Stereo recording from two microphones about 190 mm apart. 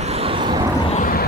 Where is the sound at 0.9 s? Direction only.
45° left (ahead or behind).